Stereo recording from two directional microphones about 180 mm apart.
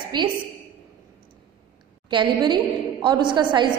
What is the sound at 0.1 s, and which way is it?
Speech, 25° right (ahead or behind).